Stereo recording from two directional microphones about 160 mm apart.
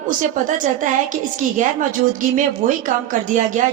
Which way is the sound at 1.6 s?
55° right (ahead or behind).